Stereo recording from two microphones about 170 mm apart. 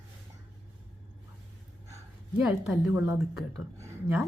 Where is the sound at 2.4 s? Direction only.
5° right (ahead or behind).